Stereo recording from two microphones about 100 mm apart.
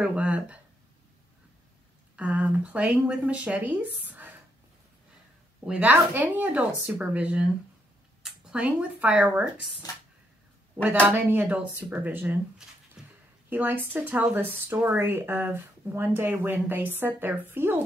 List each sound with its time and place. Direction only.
0.0 s a sound: 10° right (ahead or behind)
2.1 s speech: 15° right (ahead or behind)
5.7 s speech: 15° right (ahead or behind)
10.8 s speech: 15° right (ahead or behind)
13.0 s a sound: 5° right (ahead or behind)
13.5 s speech: 20° right (ahead or behind)